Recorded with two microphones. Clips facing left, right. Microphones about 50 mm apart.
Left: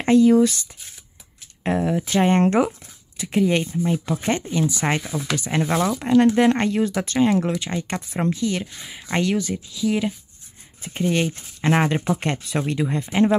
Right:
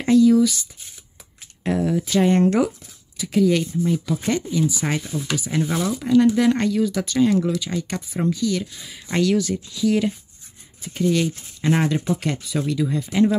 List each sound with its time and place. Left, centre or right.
0.0 s speech: left
1.6 s speech: left
5.1 s speech: left
5.5 s speech: left; by 10.1 s centre
10.8 s speech: left